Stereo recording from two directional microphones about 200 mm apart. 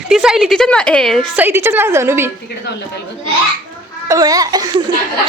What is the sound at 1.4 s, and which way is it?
Speech, 10° right (ahead or behind).